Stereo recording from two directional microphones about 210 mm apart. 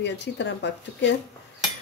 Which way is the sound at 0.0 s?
55° left (ahead or behind).